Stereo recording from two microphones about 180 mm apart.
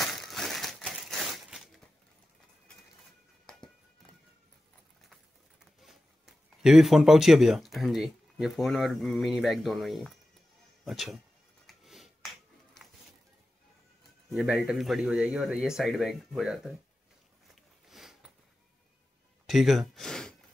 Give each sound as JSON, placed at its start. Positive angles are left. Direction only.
{"t": 0.0, "sound": "a sound", "side_deg": 0}
{"t": 3.4, "sound": "music", "side_deg": 5}
{"t": 5.1, "sound": "speech", "side_deg": 0}
{"t": 11.6, "sound": "music", "side_deg": 0}
{"t": 14.3, "sound": "speech", "side_deg": 0}
{"t": 17.8, "sound": "sniff", "side_deg": 0}
{"t": 19.4, "sound": "gasp", "side_deg": 0}